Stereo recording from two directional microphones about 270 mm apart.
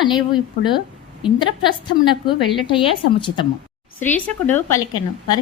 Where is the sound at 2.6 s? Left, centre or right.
Centre.